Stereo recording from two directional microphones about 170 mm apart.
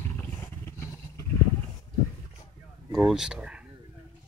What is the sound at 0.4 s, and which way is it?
Vehicle, 15° left (ahead or behind).